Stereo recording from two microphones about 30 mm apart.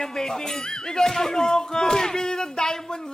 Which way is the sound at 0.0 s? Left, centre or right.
Centre.